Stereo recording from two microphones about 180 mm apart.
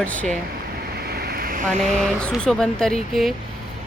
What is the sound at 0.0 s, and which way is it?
Speech, 5° left (ahead or behind).